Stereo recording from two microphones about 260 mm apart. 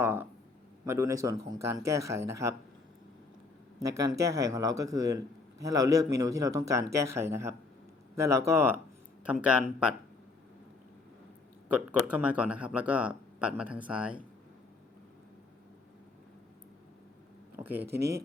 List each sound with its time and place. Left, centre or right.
0.0 s speech: centre
3.8 s speech: centre
11.7 s speech: centre
17.6 s speech: centre
17.8 s speech: right